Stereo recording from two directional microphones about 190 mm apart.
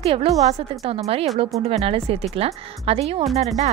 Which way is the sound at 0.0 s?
30° right (ahead or behind).